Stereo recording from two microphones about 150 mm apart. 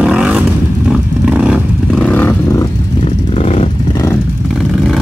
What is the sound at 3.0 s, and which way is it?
Vehicle, 45° left (ahead or behind).